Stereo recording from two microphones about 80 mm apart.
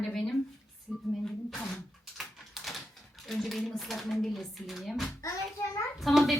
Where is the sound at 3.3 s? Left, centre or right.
Centre.